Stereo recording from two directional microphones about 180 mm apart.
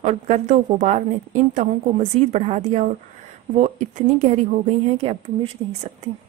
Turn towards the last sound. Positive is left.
turn(degrees=-40)  # may be behind; listen again after turning